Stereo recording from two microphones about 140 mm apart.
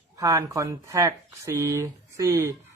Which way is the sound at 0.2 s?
25° right (ahead or behind).